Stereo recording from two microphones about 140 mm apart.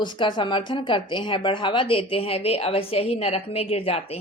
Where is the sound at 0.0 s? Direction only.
35° left (ahead or behind).